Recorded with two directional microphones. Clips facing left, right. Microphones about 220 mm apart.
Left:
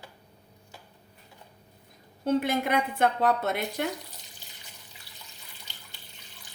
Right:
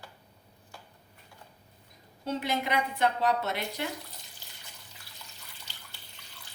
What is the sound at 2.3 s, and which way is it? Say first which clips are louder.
A woman's voice: left 6 dB; 55° left (ahead or behind).